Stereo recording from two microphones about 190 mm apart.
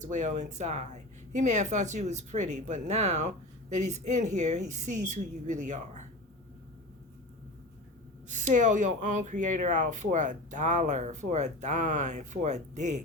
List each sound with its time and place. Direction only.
0.0 s speech: 40° right (ahead or behind)
8.3 s speech: 40° right (ahead or behind)